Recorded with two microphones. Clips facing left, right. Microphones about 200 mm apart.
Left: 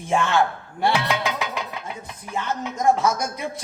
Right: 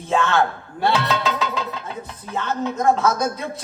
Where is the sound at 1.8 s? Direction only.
15° left (ahead or behind).